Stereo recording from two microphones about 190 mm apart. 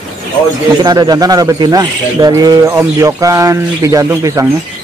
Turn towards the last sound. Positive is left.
turn(degrees=-15)  # may be behind; listen again after turning